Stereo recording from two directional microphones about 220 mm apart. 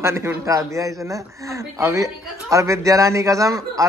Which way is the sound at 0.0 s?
10° right (ahead or behind).